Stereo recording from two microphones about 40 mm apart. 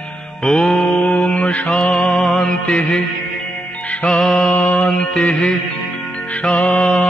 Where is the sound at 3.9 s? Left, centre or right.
Left.